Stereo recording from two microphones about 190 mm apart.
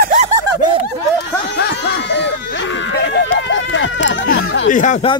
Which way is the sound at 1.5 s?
60° left (ahead or behind).